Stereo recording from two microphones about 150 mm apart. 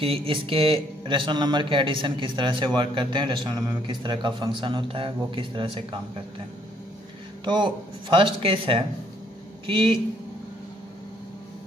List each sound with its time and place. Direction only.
0.0 s a man's voice: 40° right (ahead or behind)
7.4 s a man's voice: 30° right (ahead or behind)